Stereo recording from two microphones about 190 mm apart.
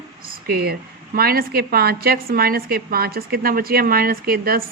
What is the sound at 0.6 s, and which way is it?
A woman's voice, 55° right (ahead or behind).